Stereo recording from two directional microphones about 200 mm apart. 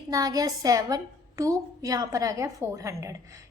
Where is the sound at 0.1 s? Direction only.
20° right (ahead or behind).